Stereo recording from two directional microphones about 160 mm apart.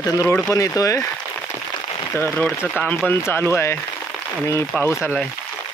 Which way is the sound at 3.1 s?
15° left (ahead or behind).